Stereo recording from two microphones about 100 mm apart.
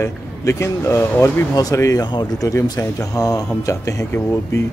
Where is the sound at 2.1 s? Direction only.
45° left (ahead or behind).